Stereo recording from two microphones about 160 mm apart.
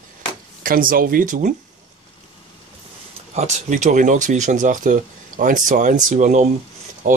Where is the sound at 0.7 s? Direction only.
60° right (ahead or behind).